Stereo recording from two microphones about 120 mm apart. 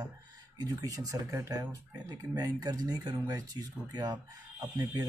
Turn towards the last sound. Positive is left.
turn(degrees=-35)  # may be behind; listen again after turning